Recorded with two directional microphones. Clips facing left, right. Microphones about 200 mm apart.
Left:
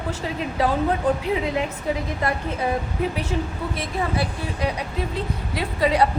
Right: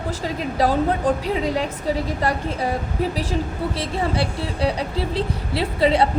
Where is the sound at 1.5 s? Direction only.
35° right (ahead or behind).